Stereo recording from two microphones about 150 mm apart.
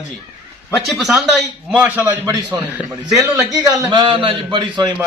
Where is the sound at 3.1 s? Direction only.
25° right (ahead or behind).